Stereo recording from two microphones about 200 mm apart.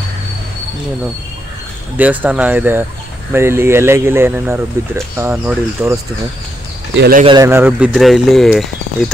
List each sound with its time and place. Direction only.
2.0 s speech: 10° right (ahead or behind)
7.0 s speech: 45° right (ahead or behind)
7.2 s speech: 15° right (ahead or behind); by 8.6 s centre (ahead or behind)